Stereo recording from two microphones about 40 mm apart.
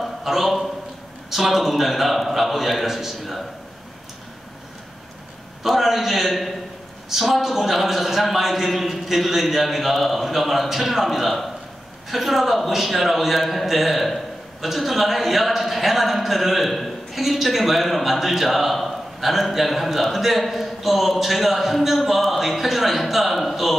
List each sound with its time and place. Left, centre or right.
0.0 s a sound: centre
1.3 s a man's voice: centre
5.6 s a man's voice: centre